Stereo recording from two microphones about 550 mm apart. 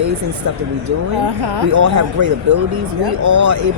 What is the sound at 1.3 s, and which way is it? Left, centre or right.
Speech, right.